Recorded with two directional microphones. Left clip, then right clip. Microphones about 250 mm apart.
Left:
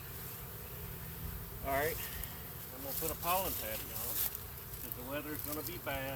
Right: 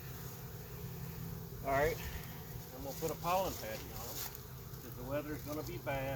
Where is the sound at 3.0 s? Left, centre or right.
Centre.